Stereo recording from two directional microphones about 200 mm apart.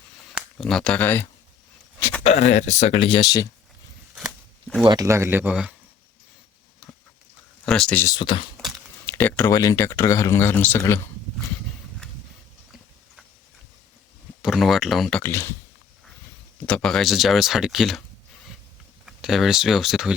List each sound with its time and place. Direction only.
0.3 s speech: centre (ahead or behind)
2.0 s a sound: 10° left (ahead or behind)
2.2 s speech: 35° left (ahead or behind); by 3.5 s 20° left (ahead or behind)
4.9 s speech: 15° right (ahead or behind)
7.6 s speech: 5° left (ahead or behind)
8.1 s speech: 25° left (ahead or behind)
8.5 s speech: 10° left (ahead or behind)
14.4 s speech: centre (ahead or behind)
15.2 s speech: 15° left (ahead or behind)
16.6 s speech: 5° left (ahead or behind)
19.0 s speech: centre (ahead or behind)